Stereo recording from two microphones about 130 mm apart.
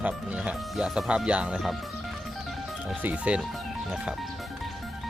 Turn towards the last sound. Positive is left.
turn(degrees=-10)  # may be behind; listen again after turning